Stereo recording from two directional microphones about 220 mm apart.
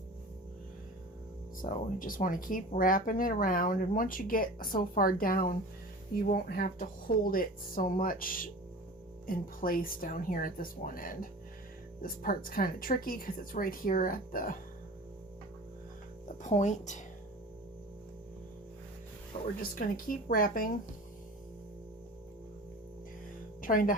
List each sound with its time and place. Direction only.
1.6 s speech: 40° left (ahead or behind)
16.4 s speech: 30° left (ahead or behind)
19.7 s speech: 40° left (ahead or behind)
23.6 s speech: 40° left (ahead or behind)